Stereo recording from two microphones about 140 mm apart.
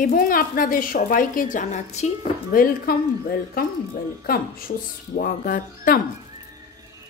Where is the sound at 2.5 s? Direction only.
90° left.